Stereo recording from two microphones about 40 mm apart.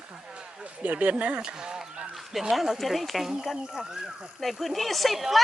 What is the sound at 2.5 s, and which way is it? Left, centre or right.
Speech, centre.